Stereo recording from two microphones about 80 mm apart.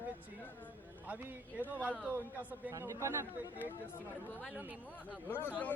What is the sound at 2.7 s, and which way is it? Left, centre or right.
Speech, right.